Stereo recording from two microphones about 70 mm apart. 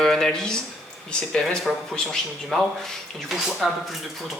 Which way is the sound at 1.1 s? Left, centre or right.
Centre.